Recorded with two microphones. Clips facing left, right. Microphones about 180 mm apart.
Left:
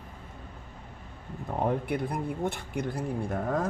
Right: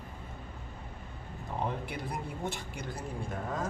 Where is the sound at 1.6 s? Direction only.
55° left (ahead or behind).